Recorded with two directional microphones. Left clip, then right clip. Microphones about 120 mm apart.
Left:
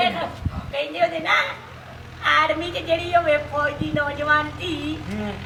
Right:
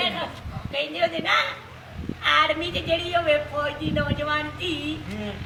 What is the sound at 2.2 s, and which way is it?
A woman's voice, centre (ahead or behind).